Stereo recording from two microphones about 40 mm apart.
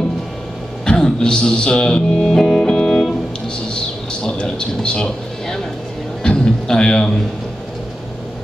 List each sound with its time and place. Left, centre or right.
0.8 s speech: centre
2.2 s music: centre
3.7 s a man's voice: left
6.2 s a sound: centre